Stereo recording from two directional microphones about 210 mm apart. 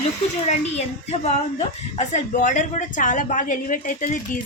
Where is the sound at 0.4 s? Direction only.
30° left (ahead or behind).